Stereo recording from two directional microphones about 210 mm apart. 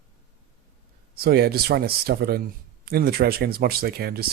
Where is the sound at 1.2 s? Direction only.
50° right (ahead or behind).